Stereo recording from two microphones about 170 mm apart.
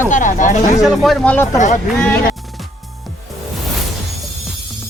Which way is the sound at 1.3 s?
15° left (ahead or behind).